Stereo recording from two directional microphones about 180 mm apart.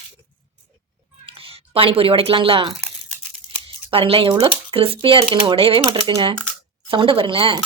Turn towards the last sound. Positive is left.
turn(degrees=-30)  # may be behind; listen again after turning